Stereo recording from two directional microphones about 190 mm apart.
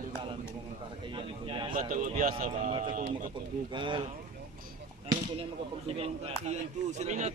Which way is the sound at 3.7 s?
25° right (ahead or behind).